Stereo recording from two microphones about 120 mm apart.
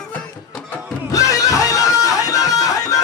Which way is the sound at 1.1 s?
30° left (ahead or behind).